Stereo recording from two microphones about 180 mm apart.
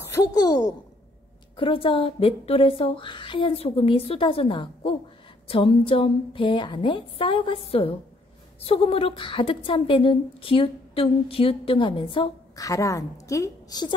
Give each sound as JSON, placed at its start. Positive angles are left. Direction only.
{"t": 0.0, "sound": "a woman's voice", "side_deg": 20}